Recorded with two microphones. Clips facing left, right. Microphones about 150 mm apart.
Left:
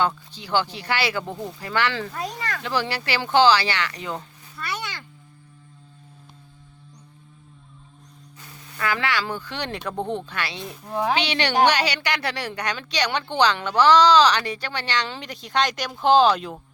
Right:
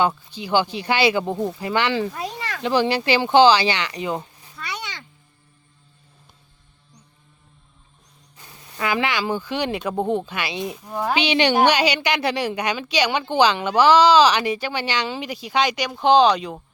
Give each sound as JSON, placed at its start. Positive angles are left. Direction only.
{"t": 0.3, "sound": "a woman's voice", "side_deg": -15}
{"t": 2.2, "sound": "a sound", "side_deg": 0}
{"t": 2.6, "sound": "a woman's voice", "side_deg": -20}
{"t": 8.4, "sound": "a woman's voice", "side_deg": -15}